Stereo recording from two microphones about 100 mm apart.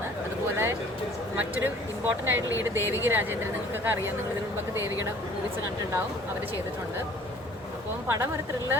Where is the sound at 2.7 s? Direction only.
20° right (ahead or behind).